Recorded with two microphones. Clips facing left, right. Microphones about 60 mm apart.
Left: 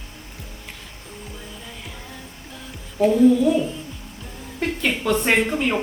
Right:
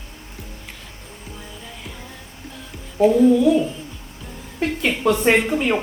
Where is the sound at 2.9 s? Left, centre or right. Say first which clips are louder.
Right 1 dB; centre.